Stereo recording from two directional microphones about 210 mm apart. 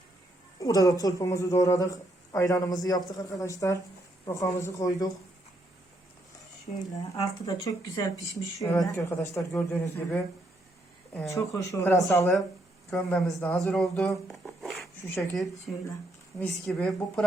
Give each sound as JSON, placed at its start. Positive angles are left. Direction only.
{"t": 0.6, "sound": "a woman's voice", "side_deg": 15}
{"t": 7.2, "sound": "a woman's voice", "side_deg": 15}